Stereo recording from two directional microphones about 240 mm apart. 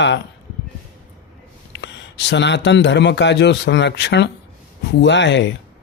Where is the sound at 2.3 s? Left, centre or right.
Left.